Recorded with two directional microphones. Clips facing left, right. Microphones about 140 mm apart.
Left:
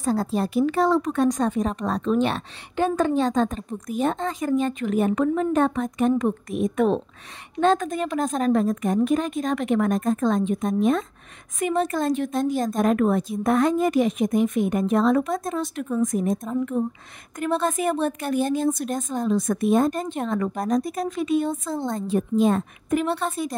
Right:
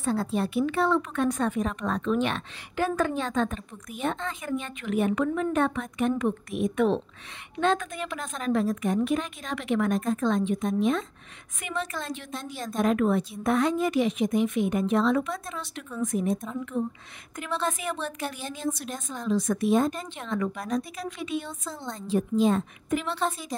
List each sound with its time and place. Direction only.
0.0 s a woman's voice: 40° left (ahead or behind)